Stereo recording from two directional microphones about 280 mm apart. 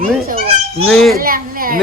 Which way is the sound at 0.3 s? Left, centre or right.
Right.